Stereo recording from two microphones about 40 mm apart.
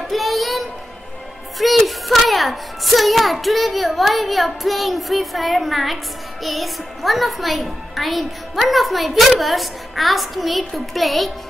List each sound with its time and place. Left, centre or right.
0.1 s music: centre
1.6 s a child's voice: centre